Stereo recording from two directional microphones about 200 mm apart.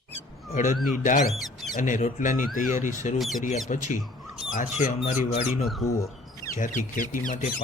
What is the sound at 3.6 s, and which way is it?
Speech, 40° left (ahead or behind).